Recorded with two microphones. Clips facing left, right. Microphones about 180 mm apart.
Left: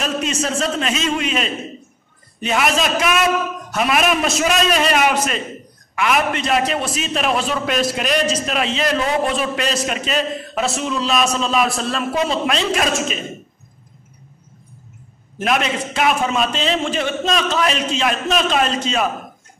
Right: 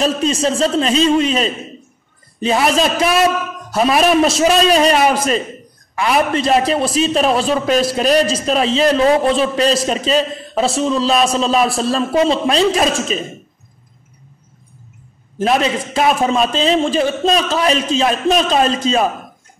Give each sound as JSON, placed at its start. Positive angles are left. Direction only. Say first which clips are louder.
{"t": 0.0, "sound": "a man's voice", "louder": "right 6 dB", "side_deg": -35}
{"t": 15.3, "sound": "a man's voice", "louder": "right 4 dB", "side_deg": -30}